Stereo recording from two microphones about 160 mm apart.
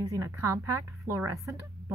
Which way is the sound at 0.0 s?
20° right (ahead or behind).